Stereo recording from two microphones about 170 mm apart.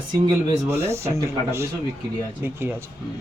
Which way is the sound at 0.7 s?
15° right (ahead or behind).